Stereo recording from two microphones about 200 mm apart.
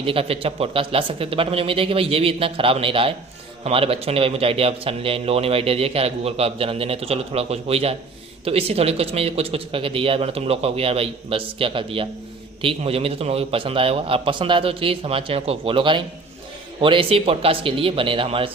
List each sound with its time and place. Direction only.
0.0 s a man's voice: 25° right (ahead or behind)